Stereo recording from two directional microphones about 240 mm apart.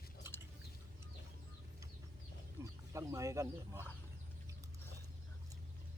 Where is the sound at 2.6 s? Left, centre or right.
Centre.